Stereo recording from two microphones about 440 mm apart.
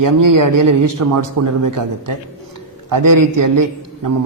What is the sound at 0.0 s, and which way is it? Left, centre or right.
A man's voice, right.